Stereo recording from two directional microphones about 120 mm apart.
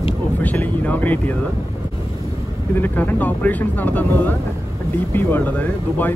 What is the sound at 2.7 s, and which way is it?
Speech, 15° left (ahead or behind).